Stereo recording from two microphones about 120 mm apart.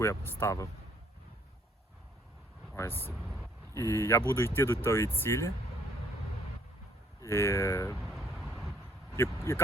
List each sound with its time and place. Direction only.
0.0 s speech: 20° left (ahead or behind)
2.7 s speech: 20° left (ahead or behind)
3.1 s speech: centre (ahead or behind)
3.8 s speech: 25° left (ahead or behind)
7.2 s speech: 25° left (ahead or behind)
8.0 s a sound: centre (ahead or behind)
9.1 s speech: 20° left (ahead or behind)